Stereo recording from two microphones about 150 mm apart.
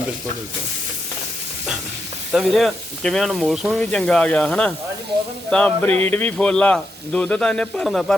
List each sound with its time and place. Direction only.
2.3 s speech: centre (ahead or behind)